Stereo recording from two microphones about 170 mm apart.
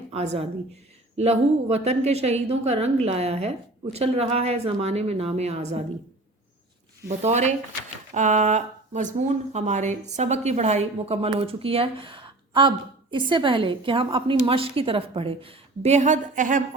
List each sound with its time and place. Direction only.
0.1 s a woman's voice: 35° right (ahead or behind)
7.2 s speech: 40° right (ahead or behind)